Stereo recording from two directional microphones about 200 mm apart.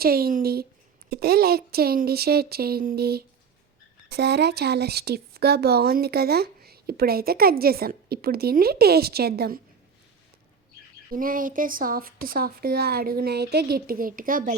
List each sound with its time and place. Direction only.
0.0 s a sound: 50° right (ahead or behind)
1.1 s speech: 50° right (ahead or behind)
11.1 s speech: 45° right (ahead or behind)